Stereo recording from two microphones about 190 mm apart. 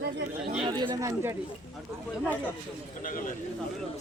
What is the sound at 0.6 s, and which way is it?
Speech, 25° right (ahead or behind).